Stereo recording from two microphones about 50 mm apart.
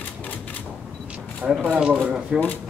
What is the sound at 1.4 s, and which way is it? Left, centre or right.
Speech, centre.